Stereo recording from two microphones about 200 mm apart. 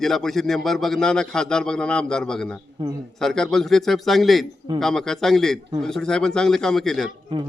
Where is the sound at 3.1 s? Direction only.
Centre (ahead or behind).